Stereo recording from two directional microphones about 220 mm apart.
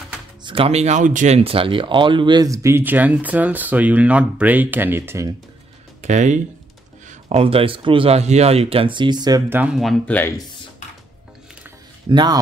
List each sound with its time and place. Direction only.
0.4 s speech: 25° right (ahead or behind)
6.0 s speech: 35° right (ahead or behind); by 10.4 s 10° left (ahead or behind)
12.1 s speech: 20° right (ahead or behind)